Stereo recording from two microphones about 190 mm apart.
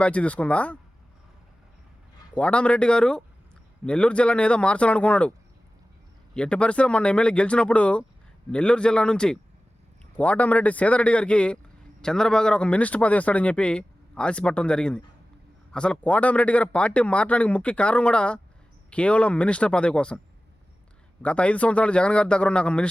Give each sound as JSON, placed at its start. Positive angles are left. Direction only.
{"t": 0.0, "sound": "a man's voice", "side_deg": 5}
{"t": 2.3, "sound": "a man's voice", "side_deg": 5}
{"t": 6.3, "sound": "a man's voice", "side_deg": 5}
{"t": 21.2, "sound": "speech", "side_deg": 5}